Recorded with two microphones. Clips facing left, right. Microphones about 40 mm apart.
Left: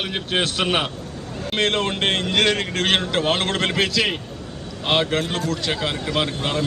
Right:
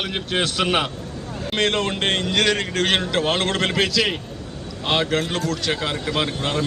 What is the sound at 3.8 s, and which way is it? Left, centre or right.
A man's voice, centre.